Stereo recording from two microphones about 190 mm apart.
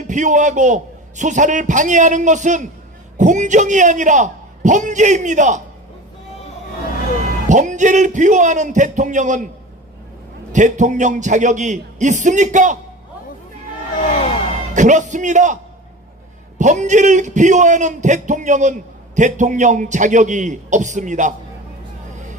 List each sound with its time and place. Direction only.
0.1 s a man's voice: 40° right (ahead or behind)
7.4 s a man's voice: 40° right (ahead or behind)
10.5 s a man's voice: 40° right (ahead or behind)
14.7 s a man's voice: 40° right (ahead or behind)
16.6 s a man's voice: 40° right (ahead or behind)